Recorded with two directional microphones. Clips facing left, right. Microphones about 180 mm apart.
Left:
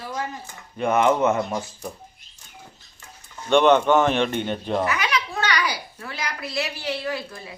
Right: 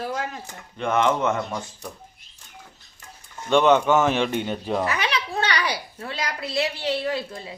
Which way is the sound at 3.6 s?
10° right (ahead or behind).